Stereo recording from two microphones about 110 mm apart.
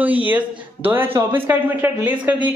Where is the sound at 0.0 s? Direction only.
15° right (ahead or behind).